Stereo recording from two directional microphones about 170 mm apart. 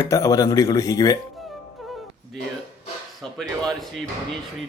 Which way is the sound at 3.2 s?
5° left (ahead or behind).